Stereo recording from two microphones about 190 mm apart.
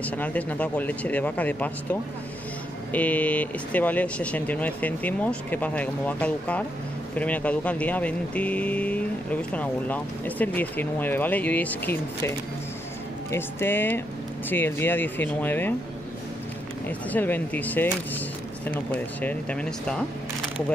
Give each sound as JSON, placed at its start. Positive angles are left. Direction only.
{"t": 0.0, "sound": "speech", "side_deg": 5}
{"t": 13.3, "sound": "speech", "side_deg": 10}
{"t": 16.8, "sound": "speech", "side_deg": 10}
{"t": 19.2, "sound": "speech", "side_deg": 5}